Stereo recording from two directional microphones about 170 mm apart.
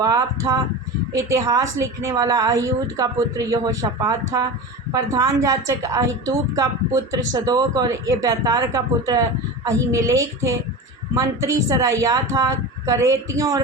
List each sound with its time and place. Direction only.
0.0 s a woman's voice: 20° right (ahead or behind)